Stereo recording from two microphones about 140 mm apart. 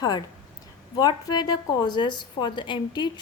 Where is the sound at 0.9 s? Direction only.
30° left (ahead or behind).